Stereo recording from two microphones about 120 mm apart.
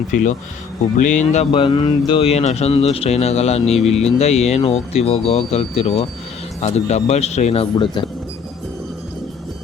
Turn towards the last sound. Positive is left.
turn(degrees=55)  # may be behind; listen again after turning